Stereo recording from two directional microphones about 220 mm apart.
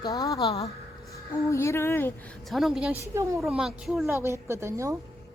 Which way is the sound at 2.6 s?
Centre (ahead or behind).